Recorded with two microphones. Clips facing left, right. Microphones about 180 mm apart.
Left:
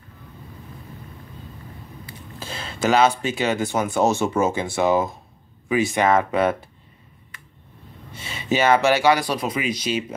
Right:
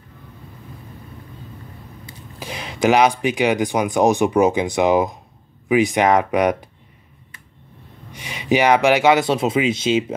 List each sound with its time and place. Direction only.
2.3 s speech: 15° right (ahead or behind)
8.1 s speech: 15° right (ahead or behind)